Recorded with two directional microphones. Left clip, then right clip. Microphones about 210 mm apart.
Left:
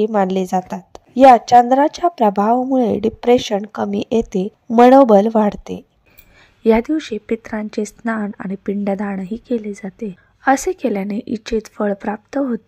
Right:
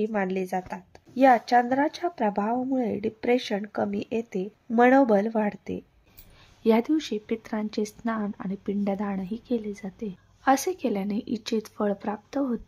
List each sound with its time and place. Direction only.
0.0 s a woman's voice: 35° left (ahead or behind)
6.6 s a woman's voice: 20° left (ahead or behind)